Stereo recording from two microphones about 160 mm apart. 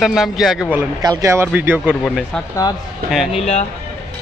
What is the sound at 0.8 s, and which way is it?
Speech, 20° right (ahead or behind).